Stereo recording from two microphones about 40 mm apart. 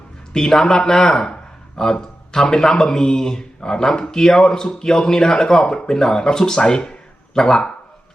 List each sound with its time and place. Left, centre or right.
0.3 s speech: centre